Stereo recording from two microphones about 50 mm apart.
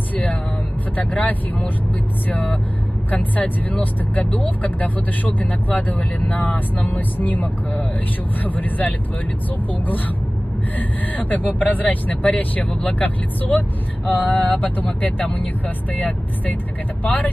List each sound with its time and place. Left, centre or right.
0.1 s music: left
0.9 s speech: left